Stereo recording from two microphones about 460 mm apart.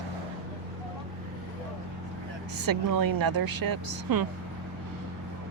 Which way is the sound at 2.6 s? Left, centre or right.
Right.